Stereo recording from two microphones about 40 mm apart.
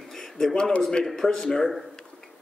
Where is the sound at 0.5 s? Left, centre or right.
Left.